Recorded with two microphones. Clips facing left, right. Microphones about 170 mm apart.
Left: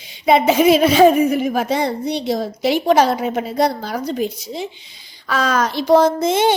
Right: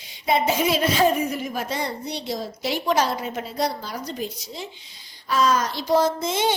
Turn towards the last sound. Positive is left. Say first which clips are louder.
# left 7 dB
turn(degrees=60)  # may be behind; listen again after turning